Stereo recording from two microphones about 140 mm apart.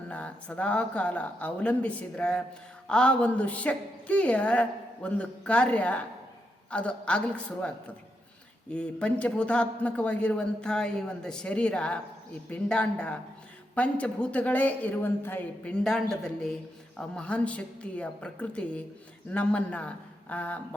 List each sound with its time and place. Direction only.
0.1 s a man's voice: 10° left (ahead or behind)